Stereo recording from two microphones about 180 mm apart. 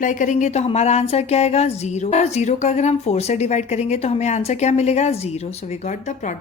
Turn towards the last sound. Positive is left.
turn(degrees=45)  # may be behind; listen again after turning